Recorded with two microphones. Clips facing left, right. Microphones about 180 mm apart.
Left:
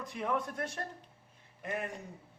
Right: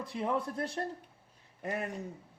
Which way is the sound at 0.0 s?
30° right (ahead or behind).